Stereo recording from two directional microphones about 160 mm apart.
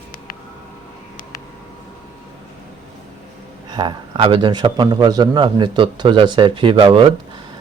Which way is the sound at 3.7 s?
30° right (ahead or behind).